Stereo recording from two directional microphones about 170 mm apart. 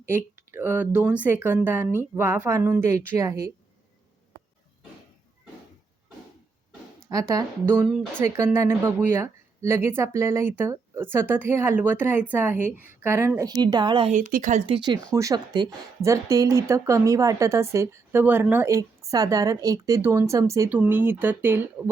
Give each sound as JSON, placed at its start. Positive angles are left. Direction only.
{"t": 0.5, "sound": "a woman's voice", "side_deg": -10}
{"t": 7.1, "sound": "a woman's voice", "side_deg": -20}
{"t": 14.1, "sound": "speech", "side_deg": -50}
{"t": 14.7, "sound": "a woman's voice", "side_deg": -25}